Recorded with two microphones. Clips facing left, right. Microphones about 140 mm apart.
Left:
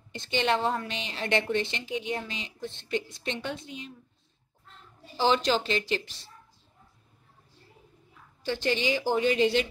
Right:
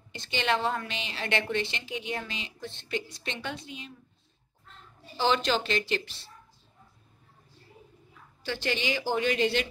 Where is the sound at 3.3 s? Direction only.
25° left (ahead or behind).